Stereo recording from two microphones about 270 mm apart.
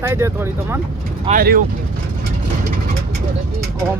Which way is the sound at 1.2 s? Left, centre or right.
Right.